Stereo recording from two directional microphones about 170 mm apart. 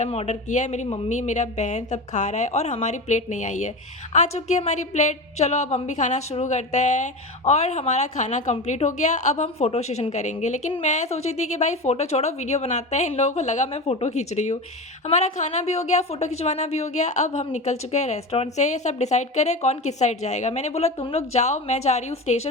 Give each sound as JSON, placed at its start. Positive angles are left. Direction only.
{"t": 0.0, "sound": "a woman's voice", "side_deg": 40}